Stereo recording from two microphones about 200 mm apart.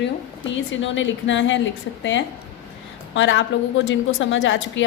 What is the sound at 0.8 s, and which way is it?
Speech, 70° left (ahead or behind).